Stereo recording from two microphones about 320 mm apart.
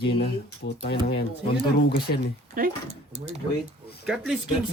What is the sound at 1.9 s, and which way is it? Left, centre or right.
Speech, left.